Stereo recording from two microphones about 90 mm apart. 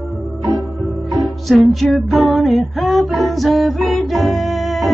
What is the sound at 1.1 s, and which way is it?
Music, centre (ahead or behind).